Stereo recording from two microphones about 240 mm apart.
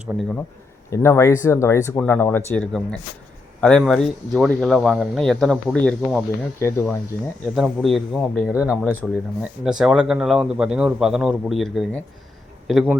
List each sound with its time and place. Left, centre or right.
0.1 s speech: centre
0.9 s speech: centre
7.5 s speech: centre